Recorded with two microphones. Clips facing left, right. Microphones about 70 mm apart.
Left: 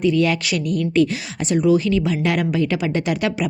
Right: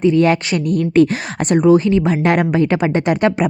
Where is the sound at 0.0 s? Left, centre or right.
Right.